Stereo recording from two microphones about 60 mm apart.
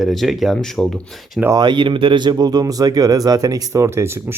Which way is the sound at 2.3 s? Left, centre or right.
Right.